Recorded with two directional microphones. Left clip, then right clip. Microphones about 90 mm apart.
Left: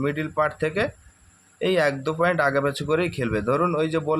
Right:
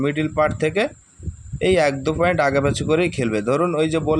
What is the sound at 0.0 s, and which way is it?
Speech, 45° right (ahead or behind).